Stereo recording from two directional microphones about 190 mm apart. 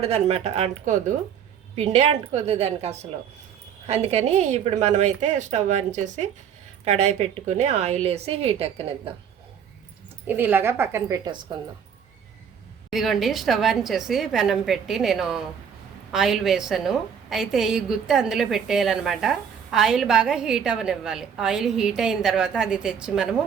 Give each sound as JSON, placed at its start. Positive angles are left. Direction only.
{"t": 0.0, "sound": "speech", "side_deg": -30}
{"t": 10.2, "sound": "speech", "side_deg": -10}
{"t": 12.9, "sound": "a woman's voice", "side_deg": 0}